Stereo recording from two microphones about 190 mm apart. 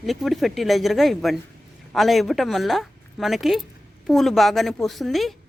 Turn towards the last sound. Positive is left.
turn(degrees=0)  # may be behind; listen again after turning